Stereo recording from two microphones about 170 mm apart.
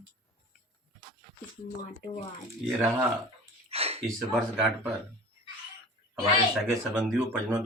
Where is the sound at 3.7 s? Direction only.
35° right (ahead or behind).